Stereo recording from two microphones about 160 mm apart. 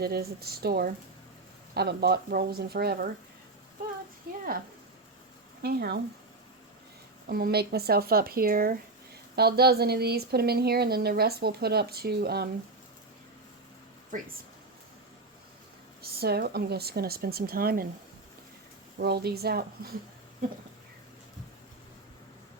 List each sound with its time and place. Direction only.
0.0 s speech: 80° right
1.7 s speech: 90° right
5.6 s speech: 80° right
7.3 s speech: 70° right (ahead or behind)
9.3 s speech: 80° right
16.0 s speech: 80° right; by 17.8 s 65° right (ahead or behind)
18.9 s speech: 85° right